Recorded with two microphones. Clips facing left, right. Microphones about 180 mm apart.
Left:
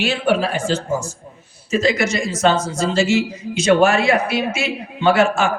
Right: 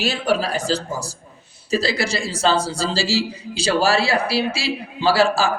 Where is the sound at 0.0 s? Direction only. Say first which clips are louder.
Left 3 dB; 40° right (ahead or behind).